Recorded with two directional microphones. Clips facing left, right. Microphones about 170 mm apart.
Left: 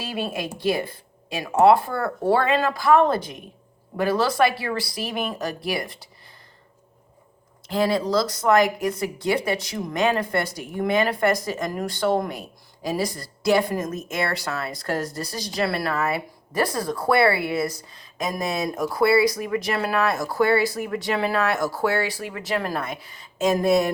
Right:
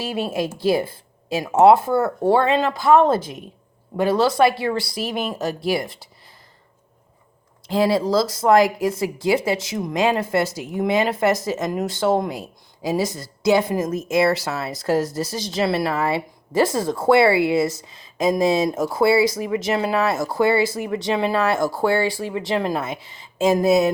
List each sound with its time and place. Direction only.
0.0 s speech: 25° right (ahead or behind)
7.7 s speech: 30° right (ahead or behind)
14.7 s speech: 5° right (ahead or behind)
15.4 s speech: 25° right (ahead or behind)